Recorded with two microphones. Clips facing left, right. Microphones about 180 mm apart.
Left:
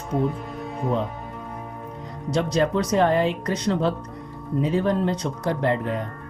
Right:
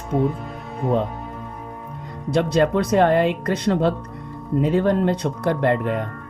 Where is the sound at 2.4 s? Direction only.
60° right (ahead or behind).